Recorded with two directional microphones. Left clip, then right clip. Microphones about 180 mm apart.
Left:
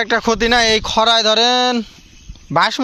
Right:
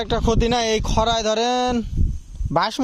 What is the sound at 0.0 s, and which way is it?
Speech, 15° right (ahead or behind).